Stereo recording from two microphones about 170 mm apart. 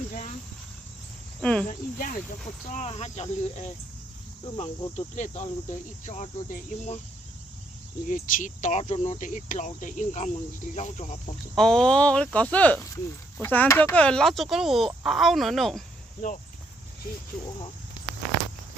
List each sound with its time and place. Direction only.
1.4 s speech: 5° left (ahead or behind)
1.6 s speech: 55° left (ahead or behind)
2.7 s speech: 40° left (ahead or behind)
8.0 s speech: 45° left (ahead or behind)
11.5 s speech: 5° left (ahead or behind)